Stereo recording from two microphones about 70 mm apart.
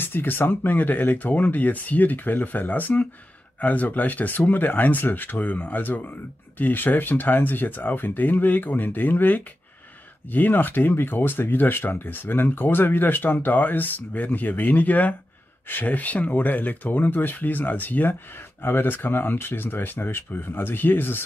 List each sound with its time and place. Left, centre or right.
0.0 s speech: left